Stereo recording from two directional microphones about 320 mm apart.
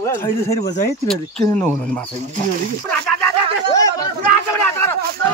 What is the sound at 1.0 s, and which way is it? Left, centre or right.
Speech, centre.